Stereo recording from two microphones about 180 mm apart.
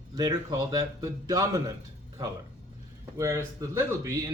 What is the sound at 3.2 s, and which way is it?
A man's voice, 15° right (ahead or behind).